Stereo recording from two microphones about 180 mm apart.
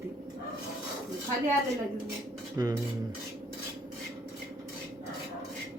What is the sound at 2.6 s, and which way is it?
Cutlery, 20° right (ahead or behind).